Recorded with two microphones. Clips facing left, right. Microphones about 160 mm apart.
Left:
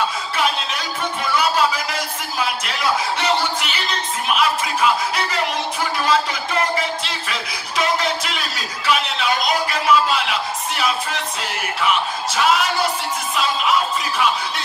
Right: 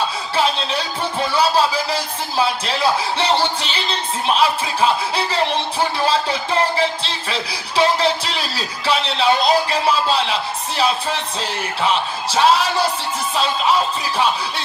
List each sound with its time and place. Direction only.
0.4 s speech: 30° right (ahead or behind)